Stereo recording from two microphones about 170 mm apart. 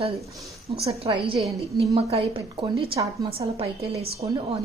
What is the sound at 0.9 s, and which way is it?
Speech, 30° right (ahead or behind).